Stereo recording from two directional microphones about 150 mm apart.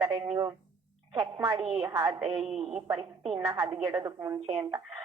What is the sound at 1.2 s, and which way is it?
Speech, 40° right (ahead or behind).